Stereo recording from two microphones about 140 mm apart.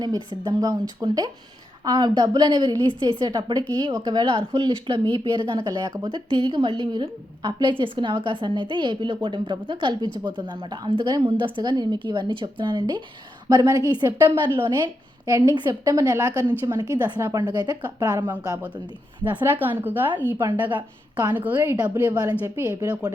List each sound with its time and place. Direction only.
0.4 s a woman's voice: 25° right (ahead or behind)
15.3 s a woman's voice: 25° right (ahead or behind)
19.4 s a woman's voice: 15° right (ahead or behind)
20.7 s a woman's voice: 30° right (ahead or behind)
21.3 s a woman's voice: 10° right (ahead or behind)
22.2 s a woman's voice: 25° right (ahead or behind)
22.6 s a woman's voice: 15° right (ahead or behind)